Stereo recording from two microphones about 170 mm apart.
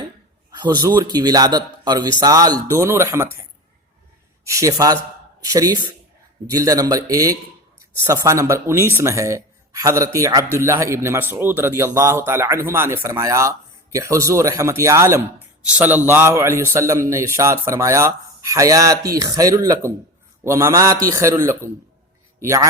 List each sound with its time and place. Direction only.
0.6 s a man's voice: 25° right (ahead or behind)
4.4 s a man's voice: 20° right (ahead or behind)